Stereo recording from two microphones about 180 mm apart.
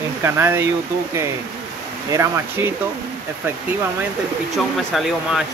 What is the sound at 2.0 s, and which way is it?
Speech, 15° right (ahead or behind).